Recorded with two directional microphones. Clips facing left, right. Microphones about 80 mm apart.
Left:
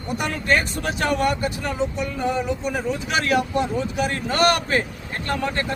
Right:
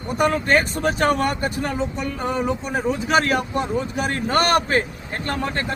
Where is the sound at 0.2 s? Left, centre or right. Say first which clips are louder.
Right 5 dB; right.